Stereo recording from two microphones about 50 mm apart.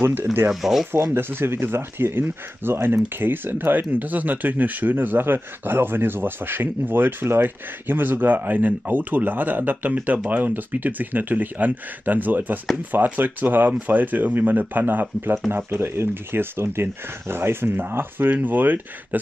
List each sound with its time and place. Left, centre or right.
0.0 s speech: right
0.5 s speech: centre
0.9 s speech: right
15.7 s speech: right